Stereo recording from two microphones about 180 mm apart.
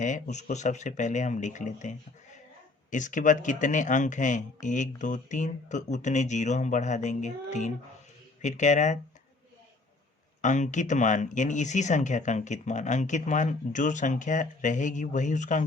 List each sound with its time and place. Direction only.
0.0 s speech: 45° left (ahead or behind)
10.4 s speech: 40° left (ahead or behind)